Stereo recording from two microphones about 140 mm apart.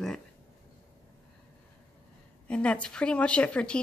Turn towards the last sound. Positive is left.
turn(degrees=10)  # may be behind; listen again after turning